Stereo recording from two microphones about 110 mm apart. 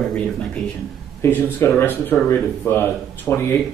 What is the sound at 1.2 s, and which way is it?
Speech, 20° left (ahead or behind).